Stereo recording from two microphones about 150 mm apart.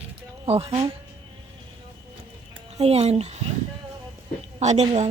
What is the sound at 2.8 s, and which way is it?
Speech, 40° right (ahead or behind).